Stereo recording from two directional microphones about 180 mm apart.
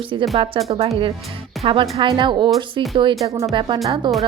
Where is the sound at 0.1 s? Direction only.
25° right (ahead or behind).